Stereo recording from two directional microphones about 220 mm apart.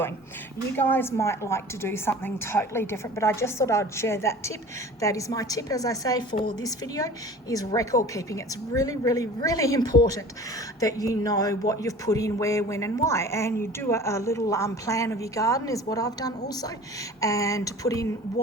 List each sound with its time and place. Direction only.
0.8 s a woman's voice: 10° left (ahead or behind)